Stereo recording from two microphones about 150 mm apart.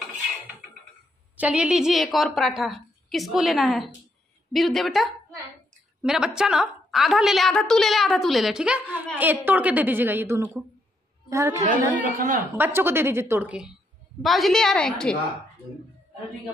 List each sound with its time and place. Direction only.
1.3 s a woman's voice: 10° right (ahead or behind)
12.0 s a woman's voice: 65° right (ahead or behind)
12.5 s a woman's voice: 15° right (ahead or behind); by 15.1 s 5° left (ahead or behind)